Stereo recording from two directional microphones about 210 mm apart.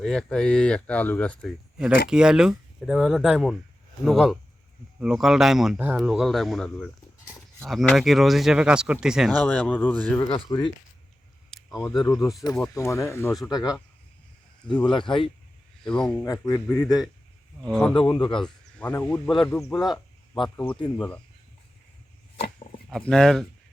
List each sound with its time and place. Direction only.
0.0 s speech: centre (ahead or behind)
10.2 s speech: 25° left (ahead or behind)
11.8 s speech: centre (ahead or behind)
12.7 s speech: 15° left (ahead or behind)
14.8 s speech: 20° left (ahead or behind)
15.8 s speech: 5° left (ahead or behind)
16.2 s speech: 15° left (ahead or behind)
17.7 s speech: centre (ahead or behind)
17.9 s speech: 25° left (ahead or behind)
18.4 s speech: 5° left (ahead or behind)
19.7 s cricket: centre (ahead or behind)
20.9 s speech: 10° left (ahead or behind)
22.9 s speech: 5° left (ahead or behind)